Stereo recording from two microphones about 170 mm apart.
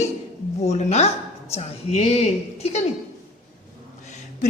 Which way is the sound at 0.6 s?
40° left (ahead or behind).